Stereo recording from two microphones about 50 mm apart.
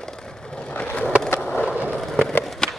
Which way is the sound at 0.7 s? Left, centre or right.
Left.